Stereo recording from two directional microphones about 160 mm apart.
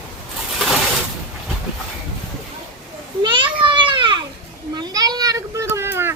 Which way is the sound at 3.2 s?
30° right (ahead or behind).